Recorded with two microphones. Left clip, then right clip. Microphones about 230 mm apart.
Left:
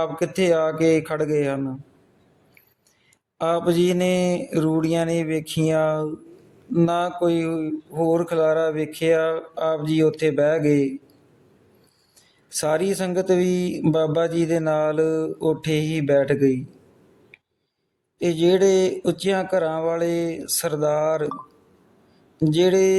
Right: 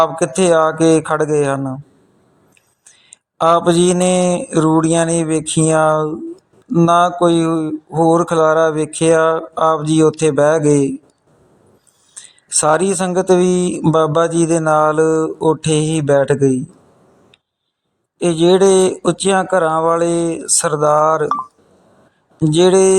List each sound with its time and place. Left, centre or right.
0.0 s speech: centre
3.4 s speech: centre
12.5 s speech: right
18.2 s speech: right
22.4 s speech: right